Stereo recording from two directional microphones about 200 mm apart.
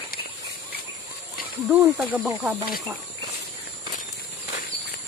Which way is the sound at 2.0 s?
5° right (ahead or behind).